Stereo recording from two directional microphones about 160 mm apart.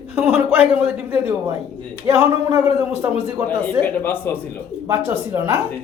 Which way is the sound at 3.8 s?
10° left (ahead or behind).